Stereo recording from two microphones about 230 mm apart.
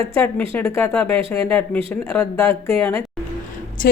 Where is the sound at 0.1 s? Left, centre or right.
Centre.